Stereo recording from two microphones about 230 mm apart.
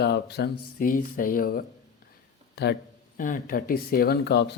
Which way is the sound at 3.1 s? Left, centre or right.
Left.